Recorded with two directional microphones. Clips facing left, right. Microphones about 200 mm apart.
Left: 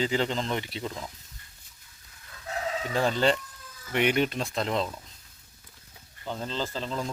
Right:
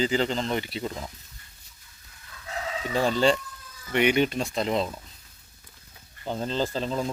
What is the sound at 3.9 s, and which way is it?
Speech, centre (ahead or behind).